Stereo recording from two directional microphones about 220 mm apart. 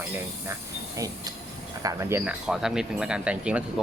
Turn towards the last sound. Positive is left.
turn(degrees=-5)  # may be behind; listen again after turning